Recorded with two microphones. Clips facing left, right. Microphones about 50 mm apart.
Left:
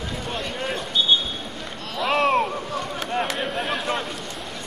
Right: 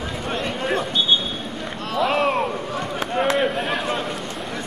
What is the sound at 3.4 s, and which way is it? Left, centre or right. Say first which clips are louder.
Speech: right 4 dB; centre.